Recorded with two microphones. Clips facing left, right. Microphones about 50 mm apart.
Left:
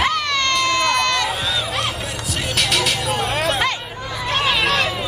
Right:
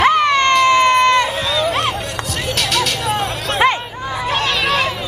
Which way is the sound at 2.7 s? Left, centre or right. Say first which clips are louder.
Right 4 dB; centre.